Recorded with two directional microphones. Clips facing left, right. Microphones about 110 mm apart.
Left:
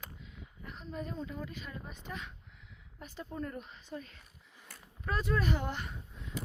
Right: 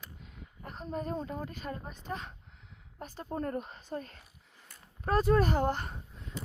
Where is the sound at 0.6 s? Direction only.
45° right (ahead or behind).